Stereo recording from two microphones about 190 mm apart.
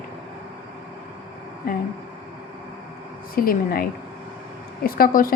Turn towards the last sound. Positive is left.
turn(degrees=50)  # may be behind; listen again after turning